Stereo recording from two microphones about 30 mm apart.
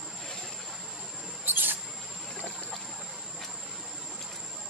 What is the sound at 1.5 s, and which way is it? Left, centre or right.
Mouse, right.